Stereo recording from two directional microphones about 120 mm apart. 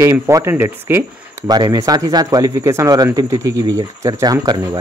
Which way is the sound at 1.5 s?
35° right (ahead or behind).